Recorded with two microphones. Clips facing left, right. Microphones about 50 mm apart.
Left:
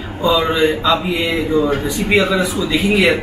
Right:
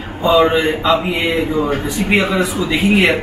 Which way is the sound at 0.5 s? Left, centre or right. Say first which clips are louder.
Even; right.